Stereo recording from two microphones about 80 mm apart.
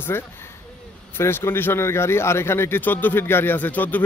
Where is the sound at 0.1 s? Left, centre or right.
Left.